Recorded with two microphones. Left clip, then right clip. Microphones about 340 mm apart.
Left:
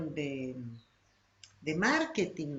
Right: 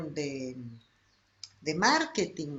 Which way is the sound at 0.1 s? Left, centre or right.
Centre.